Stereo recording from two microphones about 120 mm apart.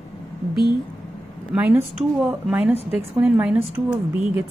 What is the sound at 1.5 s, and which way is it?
A woman's voice, 10° right (ahead or behind).